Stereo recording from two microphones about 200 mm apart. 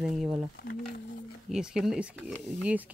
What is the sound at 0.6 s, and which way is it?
Speech, 50° left (ahead or behind).